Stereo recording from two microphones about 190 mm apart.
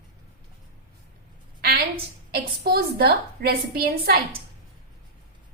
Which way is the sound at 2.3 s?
55° right (ahead or behind).